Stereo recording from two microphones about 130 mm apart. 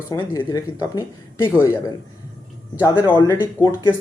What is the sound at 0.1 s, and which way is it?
Speech, 30° left (ahead or behind).